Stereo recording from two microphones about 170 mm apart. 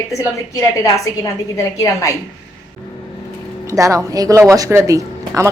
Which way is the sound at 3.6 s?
20° right (ahead or behind).